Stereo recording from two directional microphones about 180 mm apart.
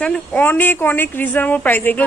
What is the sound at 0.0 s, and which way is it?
A woman's voice, 5° left (ahead or behind).